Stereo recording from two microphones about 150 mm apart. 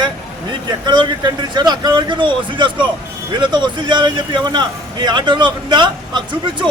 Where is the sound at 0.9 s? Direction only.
30° right (ahead or behind).